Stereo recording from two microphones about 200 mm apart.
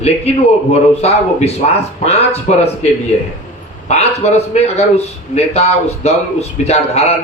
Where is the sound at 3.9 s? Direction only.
35° left (ahead or behind).